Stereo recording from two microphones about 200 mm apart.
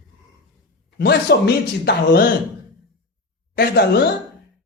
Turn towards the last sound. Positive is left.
turn(degrees=55)  # may be behind; listen again after turning